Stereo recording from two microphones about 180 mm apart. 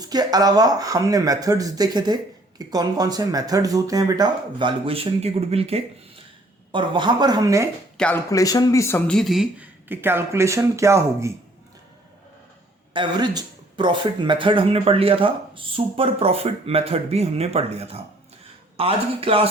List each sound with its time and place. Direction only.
0.0 s speech: 20° right (ahead or behind)
7.9 s speech: 5° left (ahead or behind)
8.3 s speech: 20° left (ahead or behind); by 11.3 s 15° right (ahead or behind)
12.9 s speech: 25° right (ahead or behind)